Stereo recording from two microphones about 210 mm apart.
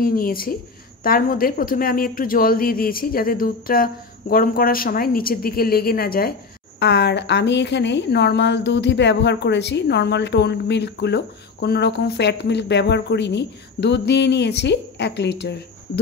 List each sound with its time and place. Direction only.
0.0 s a woman's voice: 45° left (ahead or behind)